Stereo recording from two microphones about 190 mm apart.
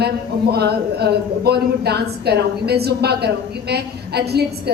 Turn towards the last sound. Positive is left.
turn(degrees=-60)  # may be behind; listen again after turning